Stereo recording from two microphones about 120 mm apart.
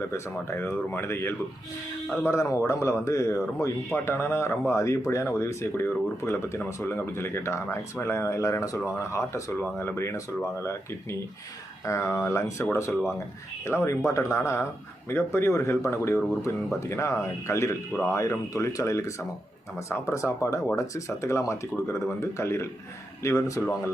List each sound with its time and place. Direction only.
0.6 s speech: 20° left (ahead or behind)
11.9 s speech: 25° left (ahead or behind)